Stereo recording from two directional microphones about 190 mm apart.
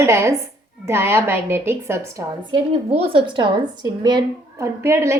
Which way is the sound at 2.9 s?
30° right (ahead or behind).